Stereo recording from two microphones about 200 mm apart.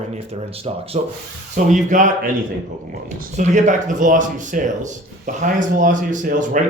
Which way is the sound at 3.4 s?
40° right (ahead or behind).